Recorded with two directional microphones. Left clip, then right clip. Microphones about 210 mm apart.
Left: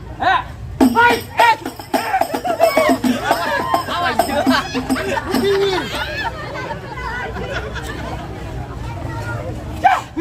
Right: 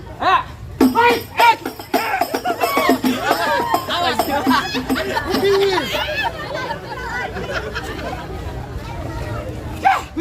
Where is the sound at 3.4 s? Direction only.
50° right (ahead or behind).